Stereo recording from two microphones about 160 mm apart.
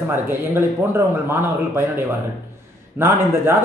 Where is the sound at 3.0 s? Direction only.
15° right (ahead or behind).